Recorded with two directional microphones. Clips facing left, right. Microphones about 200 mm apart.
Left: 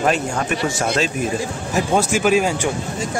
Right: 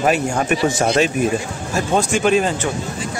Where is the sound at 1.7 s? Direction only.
15° left (ahead or behind).